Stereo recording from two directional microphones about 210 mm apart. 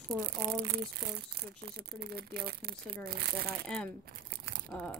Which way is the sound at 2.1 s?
50° right (ahead or behind).